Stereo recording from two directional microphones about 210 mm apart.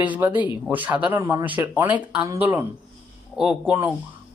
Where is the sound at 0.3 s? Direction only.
20° left (ahead or behind).